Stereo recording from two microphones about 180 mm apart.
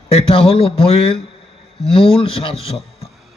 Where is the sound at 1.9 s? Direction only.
30° left (ahead or behind).